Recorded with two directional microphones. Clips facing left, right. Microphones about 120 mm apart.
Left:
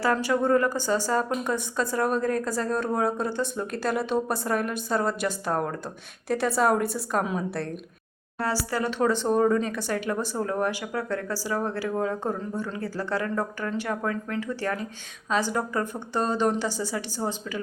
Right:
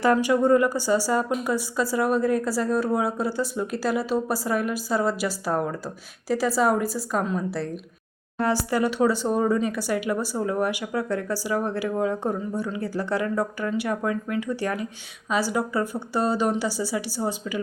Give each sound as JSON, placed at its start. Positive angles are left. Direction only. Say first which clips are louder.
{"t": 0.0, "sound": "a woman's voice", "louder": "right 4 dB", "side_deg": -15}
{"t": 8.4, "sound": "speech", "louder": "right 4 dB", "side_deg": -15}